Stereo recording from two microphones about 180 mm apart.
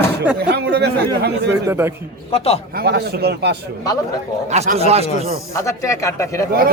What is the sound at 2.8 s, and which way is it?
Speech, 65° right (ahead or behind).